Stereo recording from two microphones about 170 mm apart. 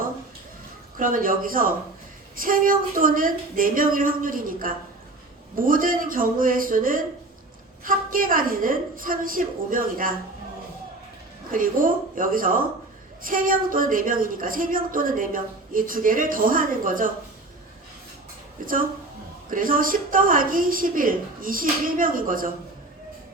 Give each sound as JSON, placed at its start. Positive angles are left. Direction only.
{"t": 0.9, "sound": "speech", "side_deg": -55}
{"t": 11.5, "sound": "speech", "side_deg": -55}
{"t": 19.5, "sound": "speech", "side_deg": -55}